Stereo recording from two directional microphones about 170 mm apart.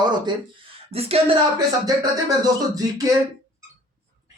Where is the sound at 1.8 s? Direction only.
20° right (ahead or behind).